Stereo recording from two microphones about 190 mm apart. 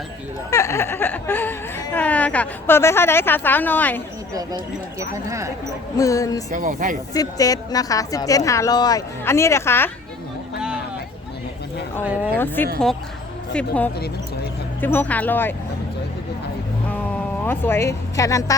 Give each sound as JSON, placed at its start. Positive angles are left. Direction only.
{"t": 0.5, "sound": "speech", "side_deg": 15}
{"t": 4.4, "sound": "speech", "side_deg": -20}
{"t": 6.0, "sound": "speech", "side_deg": 15}
{"t": 6.5, "sound": "speech", "side_deg": -45}
{"t": 7.1, "sound": "speech", "side_deg": 20}
{"t": 12.6, "sound": "speech", "side_deg": 10}
{"t": 17.4, "sound": "speech", "side_deg": 10}